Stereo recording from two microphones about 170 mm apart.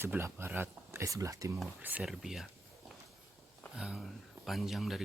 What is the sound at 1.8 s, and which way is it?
Speech, 10° right (ahead or behind).